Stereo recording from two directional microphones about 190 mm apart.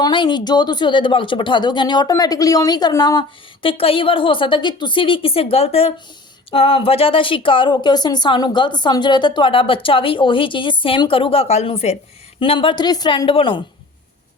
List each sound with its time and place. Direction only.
0.0 s speech: 25° left (ahead or behind)